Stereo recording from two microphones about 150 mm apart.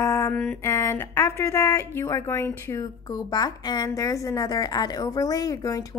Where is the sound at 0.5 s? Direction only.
20° left (ahead or behind).